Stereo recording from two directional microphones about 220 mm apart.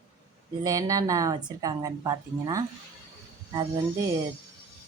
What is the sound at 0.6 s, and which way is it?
A woman's voice, 15° right (ahead or behind).